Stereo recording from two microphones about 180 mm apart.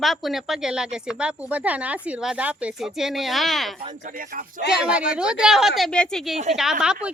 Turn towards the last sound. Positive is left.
turn(degrees=-5)  # may be behind; listen again after turning